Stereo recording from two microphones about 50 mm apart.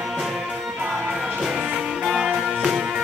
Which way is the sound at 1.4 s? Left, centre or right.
Centre.